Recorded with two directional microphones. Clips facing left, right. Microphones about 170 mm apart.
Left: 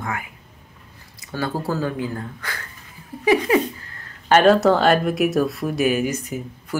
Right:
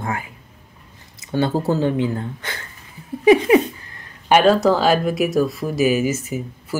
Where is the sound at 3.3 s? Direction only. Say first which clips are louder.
Right 5 dB; 20° right (ahead or behind).